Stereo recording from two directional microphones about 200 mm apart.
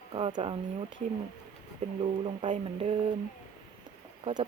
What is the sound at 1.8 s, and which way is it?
Speech, 35° right (ahead or behind).